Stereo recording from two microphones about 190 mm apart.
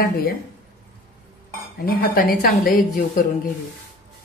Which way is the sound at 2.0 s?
50° left (ahead or behind).